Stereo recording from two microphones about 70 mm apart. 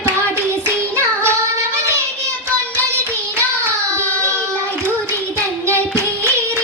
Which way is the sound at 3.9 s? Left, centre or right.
Right.